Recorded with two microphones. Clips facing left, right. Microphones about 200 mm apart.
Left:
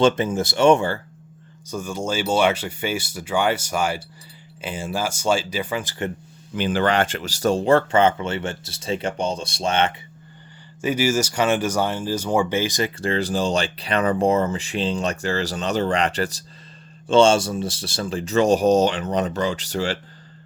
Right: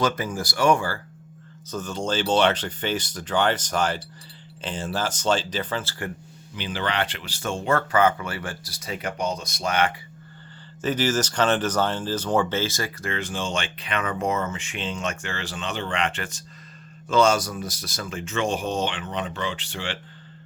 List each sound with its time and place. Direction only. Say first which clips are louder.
0.0 s speech: left 7 dB; 25° left (ahead or behind)
1.7 s speech: left 1 dB; 10° left (ahead or behind)
6.6 s speech: left 7 dB; 50° left (ahead or behind); by 9.9 s 25° left (ahead or behind)
10.8 s speech: left 3 dB; 10° left (ahead or behind)
13.0 s speech: left 9 dB; 35° left (ahead or behind)